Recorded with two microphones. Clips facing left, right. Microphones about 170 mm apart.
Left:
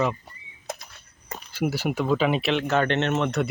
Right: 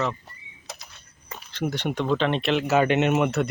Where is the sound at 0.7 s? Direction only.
50° left (ahead or behind).